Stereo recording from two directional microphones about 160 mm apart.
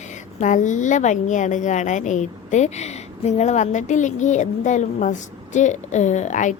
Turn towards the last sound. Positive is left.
turn(degrees=50)  # may be behind; listen again after turning